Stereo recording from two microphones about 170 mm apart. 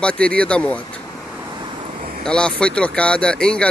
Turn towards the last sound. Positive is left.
turn(degrees=5)  # may be behind; listen again after turning